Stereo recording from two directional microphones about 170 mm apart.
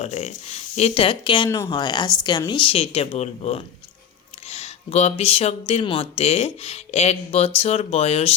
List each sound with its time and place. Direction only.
0.0 s speech: 40° left (ahead or behind)
1.5 s speech: 15° left (ahead or behind); by 8.3 s 35° left (ahead or behind)